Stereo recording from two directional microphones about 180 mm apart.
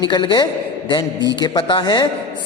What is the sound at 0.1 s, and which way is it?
A man's voice, 25° left (ahead or behind).